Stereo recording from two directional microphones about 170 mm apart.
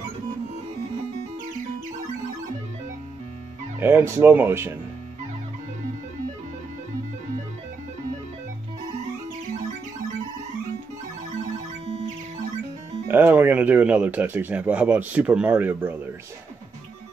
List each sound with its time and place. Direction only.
3.8 s a man's voice: 15° right (ahead or behind)
11.8 s music: 40° right (ahead or behind)
13.1 s a man's voice: 10° right (ahead or behind)